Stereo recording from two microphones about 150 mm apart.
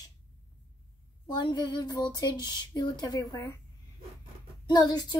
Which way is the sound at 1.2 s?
30° left (ahead or behind).